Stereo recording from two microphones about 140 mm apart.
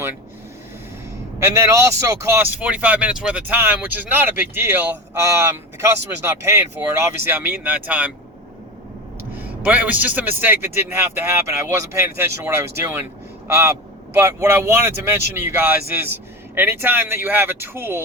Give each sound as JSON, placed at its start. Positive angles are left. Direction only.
{"t": 1.4, "sound": "a man's voice", "side_deg": -20}
{"t": 9.3, "sound": "a man's voice", "side_deg": -10}
{"t": 14.2, "sound": "a man's voice", "side_deg": -20}